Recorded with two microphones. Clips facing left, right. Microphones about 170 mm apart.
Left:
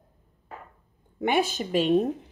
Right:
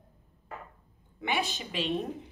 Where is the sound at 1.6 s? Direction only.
45° left (ahead or behind).